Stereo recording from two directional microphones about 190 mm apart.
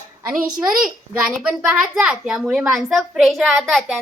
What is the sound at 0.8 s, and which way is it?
A woman's voice, centre (ahead or behind).